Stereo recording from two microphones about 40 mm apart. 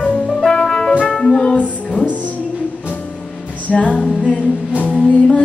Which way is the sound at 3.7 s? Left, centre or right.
Left.